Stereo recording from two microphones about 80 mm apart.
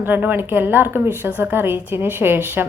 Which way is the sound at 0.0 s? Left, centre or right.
Right.